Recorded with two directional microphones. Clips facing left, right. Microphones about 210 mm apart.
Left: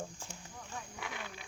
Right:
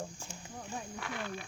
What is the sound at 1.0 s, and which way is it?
Speech, 15° left (ahead or behind).